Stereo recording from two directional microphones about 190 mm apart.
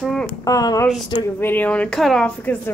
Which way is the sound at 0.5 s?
20° left (ahead or behind).